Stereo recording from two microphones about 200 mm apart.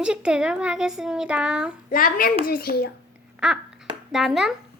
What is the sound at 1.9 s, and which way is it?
A child's voice, 45° left (ahead or behind).